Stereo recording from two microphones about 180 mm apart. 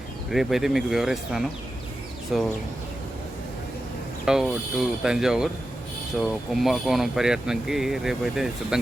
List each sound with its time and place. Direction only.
0.3 s speech: centre (ahead or behind)
4.3 s speech: 5° right (ahead or behind)